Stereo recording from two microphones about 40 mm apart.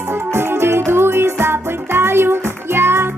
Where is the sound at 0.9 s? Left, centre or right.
Right.